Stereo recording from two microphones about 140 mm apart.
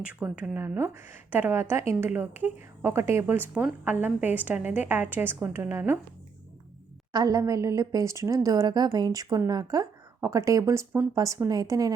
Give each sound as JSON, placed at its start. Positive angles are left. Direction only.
{"t": 0.2, "sound": "a woman's voice", "side_deg": -10}
{"t": 7.1, "sound": "a woman's voice", "side_deg": -25}